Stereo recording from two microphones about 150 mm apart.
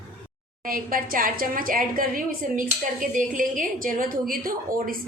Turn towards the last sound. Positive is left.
turn(degrees=-70)  # may be behind; listen again after turning